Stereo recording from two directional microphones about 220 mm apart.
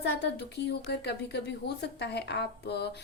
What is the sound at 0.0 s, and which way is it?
A woman's voice, 50° left (ahead or behind).